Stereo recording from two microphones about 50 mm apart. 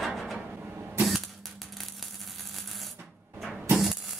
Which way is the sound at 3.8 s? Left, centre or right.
Centre.